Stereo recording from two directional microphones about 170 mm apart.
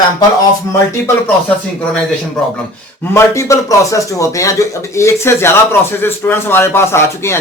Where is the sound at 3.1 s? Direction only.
15° left (ahead or behind).